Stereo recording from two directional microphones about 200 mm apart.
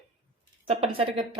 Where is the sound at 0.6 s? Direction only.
30° right (ahead or behind).